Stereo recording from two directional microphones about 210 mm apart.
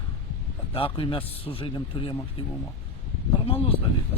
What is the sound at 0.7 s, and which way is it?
Speech, 25° left (ahead or behind).